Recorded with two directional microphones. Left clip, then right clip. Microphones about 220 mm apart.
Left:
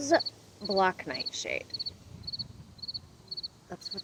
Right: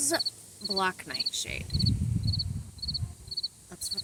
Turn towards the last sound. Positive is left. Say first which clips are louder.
# right 4 dB
turn(degrees=-35)  # may be behind; listen again after turning